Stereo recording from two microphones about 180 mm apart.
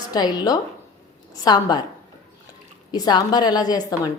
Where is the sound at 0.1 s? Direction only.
20° left (ahead or behind).